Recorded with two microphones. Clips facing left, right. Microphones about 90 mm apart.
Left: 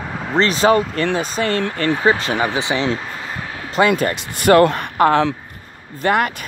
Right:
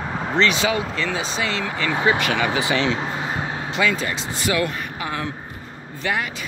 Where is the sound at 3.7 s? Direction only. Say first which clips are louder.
Left 7 dB; 50° left (ahead or behind); by 5.3 s 65° left (ahead or behind).